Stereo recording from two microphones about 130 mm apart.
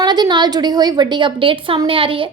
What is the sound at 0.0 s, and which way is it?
A woman's voice, 35° right (ahead or behind).